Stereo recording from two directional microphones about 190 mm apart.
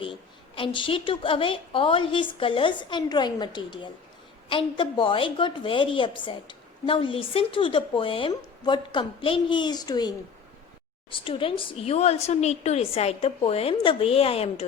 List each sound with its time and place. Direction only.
0.0 s a woman's voice: 25° left (ahead or behind)